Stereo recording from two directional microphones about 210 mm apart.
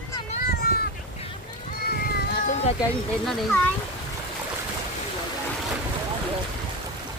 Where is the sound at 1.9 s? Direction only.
50° left (ahead or behind).